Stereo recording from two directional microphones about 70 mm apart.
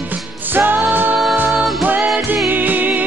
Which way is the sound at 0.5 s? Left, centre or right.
Right.